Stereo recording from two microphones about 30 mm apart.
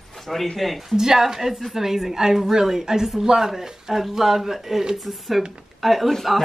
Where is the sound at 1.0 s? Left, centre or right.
Centre.